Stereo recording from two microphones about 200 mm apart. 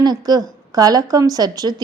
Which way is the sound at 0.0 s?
20° right (ahead or behind).